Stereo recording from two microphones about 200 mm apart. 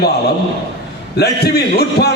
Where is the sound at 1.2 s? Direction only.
55° left (ahead or behind).